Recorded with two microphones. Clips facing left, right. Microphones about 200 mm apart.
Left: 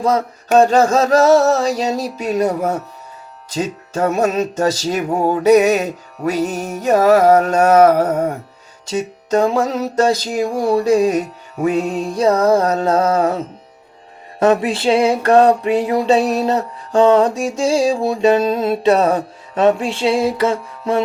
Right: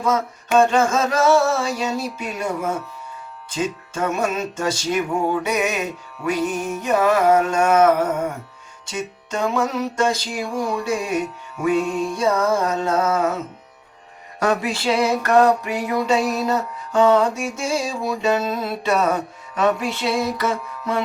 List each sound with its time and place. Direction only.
0.0 s music: 40° left (ahead or behind)
14.3 s speech: 25° left (ahead or behind)
14.8 s music: 25° left (ahead or behind)